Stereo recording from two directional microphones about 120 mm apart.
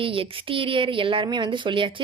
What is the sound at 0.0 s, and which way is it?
A woman's voice, 50° right (ahead or behind).